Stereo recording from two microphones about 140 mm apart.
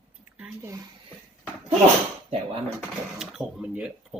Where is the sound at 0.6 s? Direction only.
25° right (ahead or behind).